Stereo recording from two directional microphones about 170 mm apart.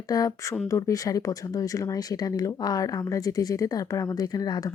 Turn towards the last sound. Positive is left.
turn(degrees=25)  # may be behind; listen again after turning